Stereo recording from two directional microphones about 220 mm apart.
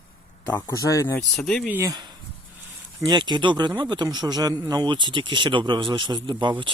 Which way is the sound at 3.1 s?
20° right (ahead or behind).